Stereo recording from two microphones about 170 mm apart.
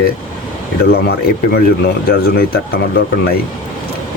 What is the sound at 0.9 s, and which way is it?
Speech, 65° left (ahead or behind).